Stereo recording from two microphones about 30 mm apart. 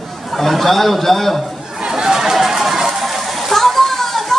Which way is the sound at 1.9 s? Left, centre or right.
Centre.